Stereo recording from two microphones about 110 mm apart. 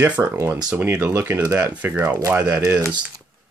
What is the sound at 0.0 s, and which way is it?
Speech, 20° right (ahead or behind).